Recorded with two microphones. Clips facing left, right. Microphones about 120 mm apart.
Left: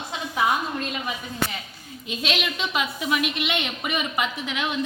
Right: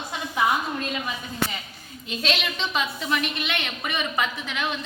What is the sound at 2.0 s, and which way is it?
A woman's voice, 10° left (ahead or behind).